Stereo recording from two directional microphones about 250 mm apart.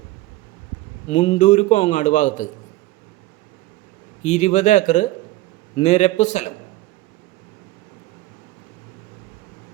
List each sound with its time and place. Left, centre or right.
1.0 s a man's voice: left
4.2 s a man's voice: left